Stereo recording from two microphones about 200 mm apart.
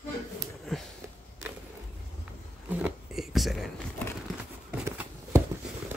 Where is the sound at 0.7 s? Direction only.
Centre (ahead or behind).